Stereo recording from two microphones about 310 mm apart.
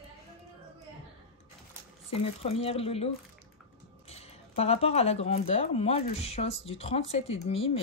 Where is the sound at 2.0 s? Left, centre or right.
Centre.